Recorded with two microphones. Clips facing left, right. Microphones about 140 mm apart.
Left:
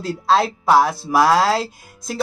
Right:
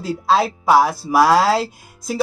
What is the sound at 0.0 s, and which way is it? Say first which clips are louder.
Speech: even; 5° right (ahead or behind).